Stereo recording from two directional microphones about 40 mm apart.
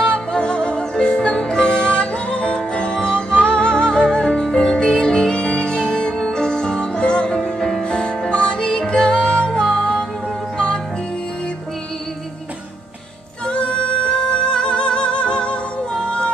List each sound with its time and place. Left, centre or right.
0.0 s music: left
13.5 s music: left